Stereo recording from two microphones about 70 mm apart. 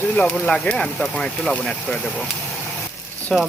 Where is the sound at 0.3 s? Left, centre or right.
Centre.